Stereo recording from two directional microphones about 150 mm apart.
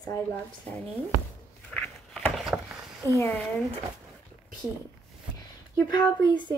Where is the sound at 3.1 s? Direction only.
15° left (ahead or behind).